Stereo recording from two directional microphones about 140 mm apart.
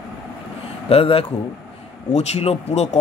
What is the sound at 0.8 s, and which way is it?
Speech, 45° left (ahead or behind).